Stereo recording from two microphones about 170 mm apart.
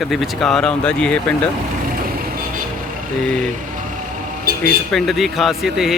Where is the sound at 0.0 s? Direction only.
Centre (ahead or behind).